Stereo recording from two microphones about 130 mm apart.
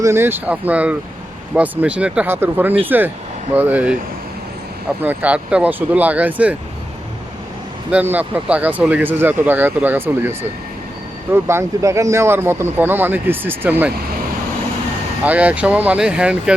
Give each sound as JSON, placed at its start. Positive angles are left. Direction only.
{"t": 0.0, "sound": "speech", "side_deg": -20}
{"t": 5.0, "sound": "speech", "side_deg": -10}
{"t": 7.9, "sound": "speech", "side_deg": -10}
{"t": 15.2, "sound": "speech", "side_deg": -10}